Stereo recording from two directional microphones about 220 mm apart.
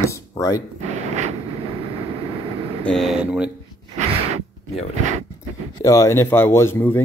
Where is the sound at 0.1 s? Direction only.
15° left (ahead or behind).